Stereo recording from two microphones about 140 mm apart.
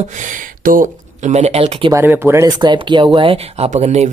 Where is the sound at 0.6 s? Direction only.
80° right.